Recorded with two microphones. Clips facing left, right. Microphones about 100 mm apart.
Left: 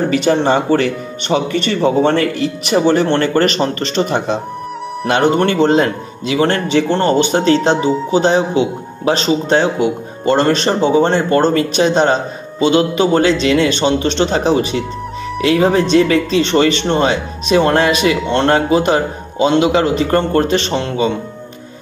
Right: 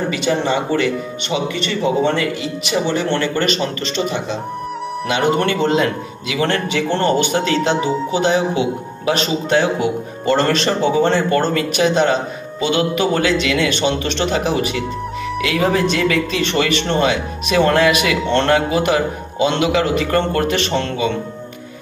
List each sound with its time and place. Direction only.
0.1 s a man's voice: 40° left (ahead or behind); by 20.9 s 20° left (ahead or behind)